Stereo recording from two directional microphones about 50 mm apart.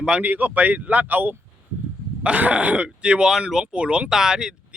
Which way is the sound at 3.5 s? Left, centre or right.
Centre.